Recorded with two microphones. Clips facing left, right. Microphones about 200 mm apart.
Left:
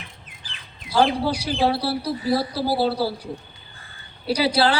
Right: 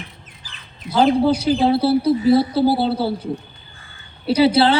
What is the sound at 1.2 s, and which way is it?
Speech, 25° right (ahead or behind).